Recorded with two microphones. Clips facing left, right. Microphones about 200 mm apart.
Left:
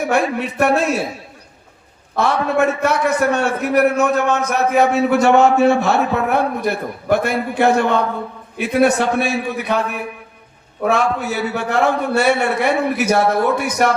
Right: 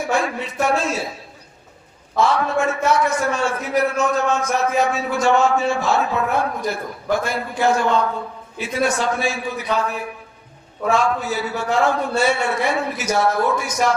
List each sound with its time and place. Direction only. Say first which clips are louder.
0.0 s a man's voice: left 4 dB; 60° left (ahead or behind)
2.1 s a man's voice: left 2 dB; 65° left (ahead or behind)